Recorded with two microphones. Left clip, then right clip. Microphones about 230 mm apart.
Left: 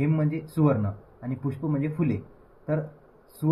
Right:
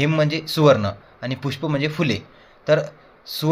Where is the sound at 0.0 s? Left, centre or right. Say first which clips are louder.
Right 8 dB; right.